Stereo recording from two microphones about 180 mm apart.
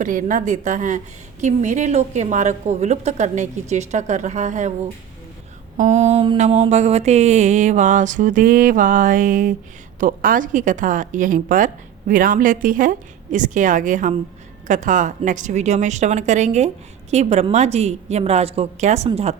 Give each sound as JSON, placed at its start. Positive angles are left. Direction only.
{"t": 0.0, "sound": "a woman's voice", "side_deg": -45}
{"t": 5.7, "sound": "mantra", "side_deg": -40}
{"t": 14.7, "sound": "a woman's voice", "side_deg": -45}